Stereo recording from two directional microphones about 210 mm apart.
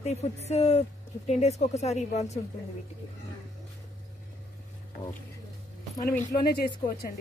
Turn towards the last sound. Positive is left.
turn(degrees=50)  # may be behind; listen again after turning